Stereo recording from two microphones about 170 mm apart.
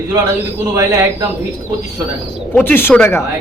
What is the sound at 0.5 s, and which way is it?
Speech, 20° right (ahead or behind).